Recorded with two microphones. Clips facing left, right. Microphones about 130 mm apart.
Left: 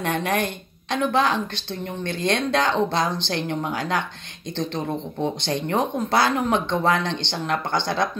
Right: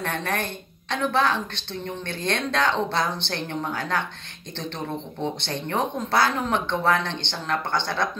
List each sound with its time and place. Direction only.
0.0 s speech: 15° left (ahead or behind)
5.4 s speech: 15° left (ahead or behind)